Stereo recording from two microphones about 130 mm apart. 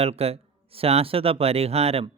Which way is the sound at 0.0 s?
50° right (ahead or behind).